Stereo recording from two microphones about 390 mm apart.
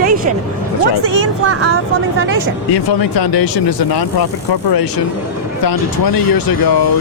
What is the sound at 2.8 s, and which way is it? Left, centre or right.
Speech, left.